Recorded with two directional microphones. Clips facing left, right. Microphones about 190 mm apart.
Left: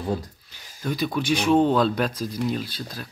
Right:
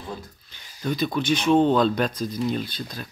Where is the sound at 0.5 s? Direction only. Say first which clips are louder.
Right 2 dB; 5° left (ahead or behind).